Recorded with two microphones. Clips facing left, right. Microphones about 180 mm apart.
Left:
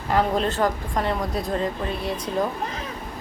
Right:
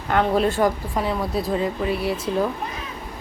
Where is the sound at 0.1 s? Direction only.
Centre (ahead or behind).